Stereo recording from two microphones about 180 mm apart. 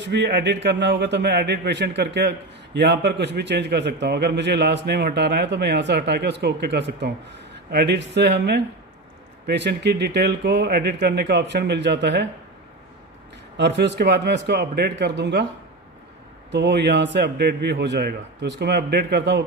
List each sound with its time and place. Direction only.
0.0 s a man's voice: 75° right (ahead or behind)
13.6 s a man's voice: 70° right (ahead or behind)
16.5 s a man's voice: 70° right (ahead or behind)